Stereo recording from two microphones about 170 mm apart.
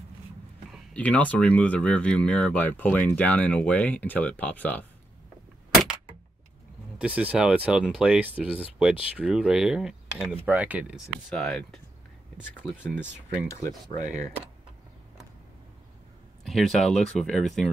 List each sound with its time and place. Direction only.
0.7 s speech: 10° left (ahead or behind)
7.0 s speech: 10° right (ahead or behind)
11.2 s speech: 5° left (ahead or behind)
13.5 s speech: 15° left (ahead or behind)
13.8 s speech: 45° right (ahead or behind)
16.4 s speech: centre (ahead or behind)